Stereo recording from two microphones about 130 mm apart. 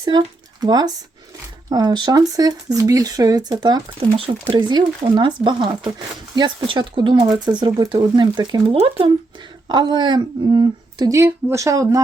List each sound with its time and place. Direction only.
0.6 s speech: 30° right (ahead or behind)
8.7 s speech: 45° right (ahead or behind)
9.6 s speech: 35° right (ahead or behind)